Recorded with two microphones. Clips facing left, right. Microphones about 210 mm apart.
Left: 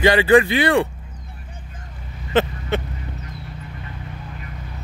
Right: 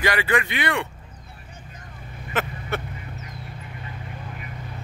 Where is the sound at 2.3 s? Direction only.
30° left (ahead or behind).